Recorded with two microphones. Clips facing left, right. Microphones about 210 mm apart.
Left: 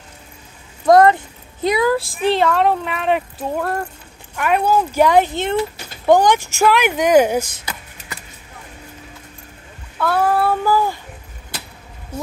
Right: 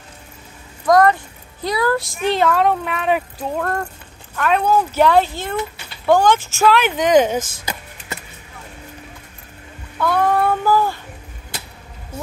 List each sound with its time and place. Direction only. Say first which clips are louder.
0.8 s speech: left 3 dB; 25° left (ahead or behind)
2.1 s speech: right 1 dB; centre (ahead or behind)
9.9 s speech: even; 5° left (ahead or behind)